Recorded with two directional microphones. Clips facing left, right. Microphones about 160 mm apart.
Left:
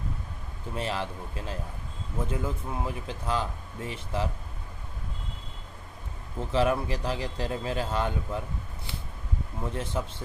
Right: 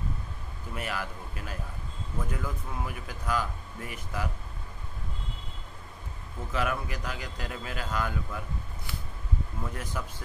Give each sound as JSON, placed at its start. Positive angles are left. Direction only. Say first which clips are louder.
{"t": 0.7, "sound": "speech", "louder": "left 4 dB", "side_deg": 25}
{"t": 6.5, "sound": "speech", "louder": "left 6 dB", "side_deg": 30}